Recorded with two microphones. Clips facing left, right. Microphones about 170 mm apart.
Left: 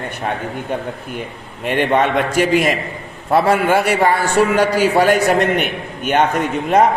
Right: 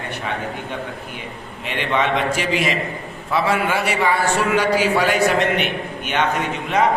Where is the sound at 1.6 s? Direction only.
50° left (ahead or behind).